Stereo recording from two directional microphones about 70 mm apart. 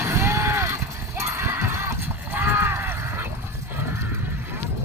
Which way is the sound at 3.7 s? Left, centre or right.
Right.